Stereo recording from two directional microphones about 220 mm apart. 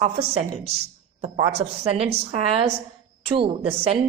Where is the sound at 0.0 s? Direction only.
30° right (ahead or behind).